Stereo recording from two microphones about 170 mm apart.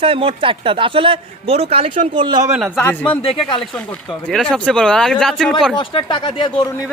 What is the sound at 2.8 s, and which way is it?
Speech, 10° left (ahead or behind).